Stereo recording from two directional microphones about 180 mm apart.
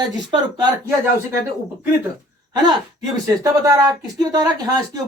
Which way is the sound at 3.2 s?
20° right (ahead or behind).